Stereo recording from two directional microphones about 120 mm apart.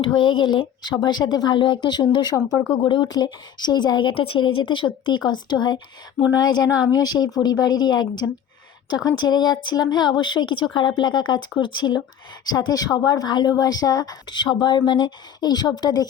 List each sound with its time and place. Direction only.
0.3 s a woman's voice: 40° left (ahead or behind)